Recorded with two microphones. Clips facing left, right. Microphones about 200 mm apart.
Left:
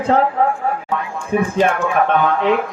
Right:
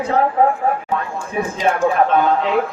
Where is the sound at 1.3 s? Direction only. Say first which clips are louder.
Left 5 dB; 60° left (ahead or behind).